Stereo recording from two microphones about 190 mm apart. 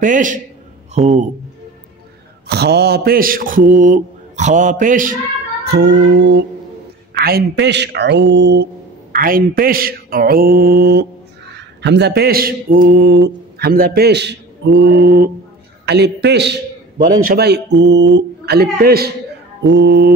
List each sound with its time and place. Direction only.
0.0 s mantra: 45° right (ahead or behind)
0.9 s a man's voice: 35° right (ahead or behind)
2.4 s mantra: 60° right (ahead or behind)
5.7 s a man's voice: 65° right (ahead or behind)
9.1 s mantra: 50° right (ahead or behind)
11.5 s a man's voice: 65° right (ahead or behind)